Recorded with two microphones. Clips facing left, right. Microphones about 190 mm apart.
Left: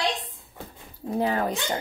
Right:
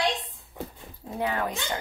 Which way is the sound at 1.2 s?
35° left (ahead or behind).